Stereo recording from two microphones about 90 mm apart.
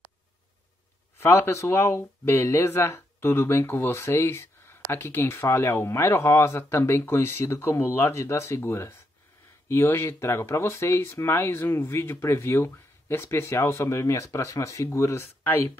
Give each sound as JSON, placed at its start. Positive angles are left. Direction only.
{"t": 1.2, "sound": "speech", "side_deg": 30}